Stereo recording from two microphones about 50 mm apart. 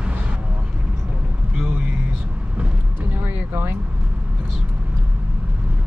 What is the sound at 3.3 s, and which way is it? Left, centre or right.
Vehicle, right.